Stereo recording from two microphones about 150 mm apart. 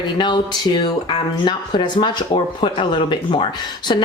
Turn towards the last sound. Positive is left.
turn(degrees=30)  # may be behind; listen again after turning